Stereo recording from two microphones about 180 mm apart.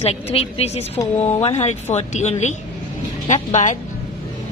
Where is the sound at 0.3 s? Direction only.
35° left (ahead or behind).